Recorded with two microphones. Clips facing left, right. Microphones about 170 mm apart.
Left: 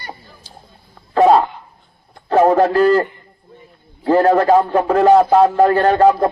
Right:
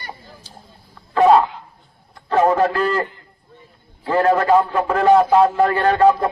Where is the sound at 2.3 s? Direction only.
35° left (ahead or behind).